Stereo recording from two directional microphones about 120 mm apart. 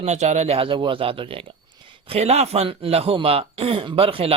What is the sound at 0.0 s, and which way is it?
Speech, 75° right (ahead or behind).